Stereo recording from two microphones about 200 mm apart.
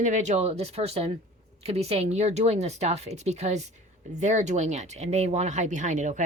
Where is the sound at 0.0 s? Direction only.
35° right (ahead or behind).